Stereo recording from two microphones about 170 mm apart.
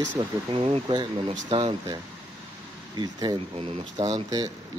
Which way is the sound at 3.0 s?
25° right (ahead or behind).